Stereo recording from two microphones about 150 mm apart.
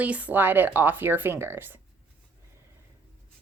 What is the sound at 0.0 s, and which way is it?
Speech, 10° right (ahead or behind).